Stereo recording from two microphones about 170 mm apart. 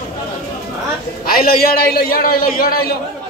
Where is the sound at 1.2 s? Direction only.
60° left (ahead or behind).